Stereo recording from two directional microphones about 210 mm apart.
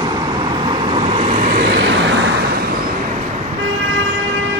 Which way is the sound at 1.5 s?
50° right (ahead or behind).